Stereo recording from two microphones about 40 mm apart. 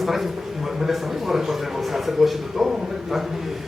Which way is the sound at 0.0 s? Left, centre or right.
Centre.